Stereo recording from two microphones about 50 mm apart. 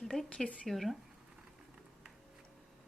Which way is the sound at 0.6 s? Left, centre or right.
Centre.